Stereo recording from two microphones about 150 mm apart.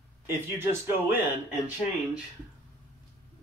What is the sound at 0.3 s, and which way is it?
Speech, 15° right (ahead or behind).